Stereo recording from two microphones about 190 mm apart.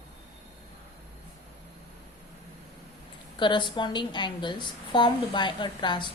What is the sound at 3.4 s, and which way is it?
A woman's voice, 25° left (ahead or behind).